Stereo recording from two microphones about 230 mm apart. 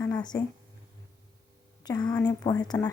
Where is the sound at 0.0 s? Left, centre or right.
Centre.